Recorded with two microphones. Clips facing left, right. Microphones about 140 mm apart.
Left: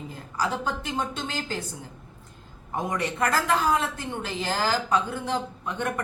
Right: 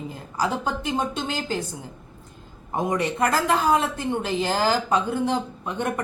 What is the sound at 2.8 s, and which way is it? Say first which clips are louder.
A woman's voice: right 4 dB; 20° right (ahead or behind).